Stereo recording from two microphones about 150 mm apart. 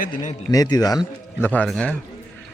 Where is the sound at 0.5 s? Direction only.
25° left (ahead or behind).